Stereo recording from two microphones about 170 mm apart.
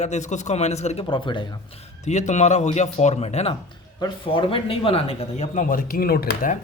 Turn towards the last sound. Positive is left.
turn(degrees=55)  # may be behind; listen again after turning